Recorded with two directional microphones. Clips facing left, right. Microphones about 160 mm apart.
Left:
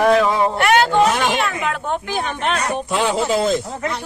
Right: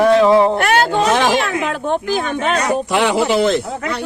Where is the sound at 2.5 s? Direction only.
75° right (ahead or behind).